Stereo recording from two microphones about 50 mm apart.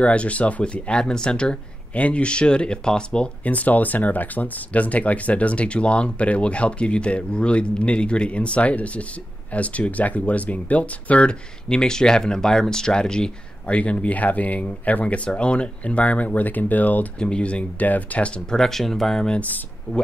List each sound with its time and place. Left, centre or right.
0.0 s speech: left
3.4 s speech: left
11.7 s speech: centre
13.7 s speech: left
17.2 s speech: left
18.5 s speech: centre
19.9 s speech: left